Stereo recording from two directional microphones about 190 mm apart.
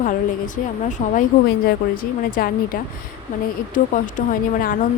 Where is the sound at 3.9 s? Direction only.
45° left (ahead or behind).